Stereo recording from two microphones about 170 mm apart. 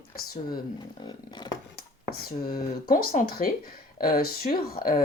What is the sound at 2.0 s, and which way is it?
Speech, 60° left (ahead or behind).